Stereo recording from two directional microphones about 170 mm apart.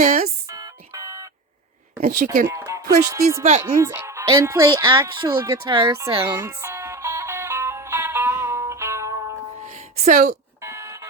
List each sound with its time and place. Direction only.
0.0 s speech: 50° right (ahead or behind)
0.5 s alarm clock: 20° right (ahead or behind)
2.0 s speech: 55° right (ahead or behind)
2.5 s speech: 15° right (ahead or behind)
6.4 s music: 15° right (ahead or behind)
9.6 s music: 50° right (ahead or behind)
10.6 s alarm: 15° right (ahead or behind)